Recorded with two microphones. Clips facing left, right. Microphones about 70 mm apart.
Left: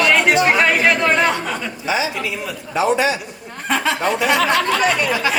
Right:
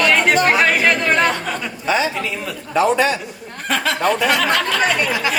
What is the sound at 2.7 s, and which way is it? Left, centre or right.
Speech, right.